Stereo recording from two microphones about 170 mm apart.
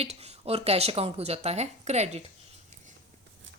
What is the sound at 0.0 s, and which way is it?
Speech, 40° right (ahead or behind).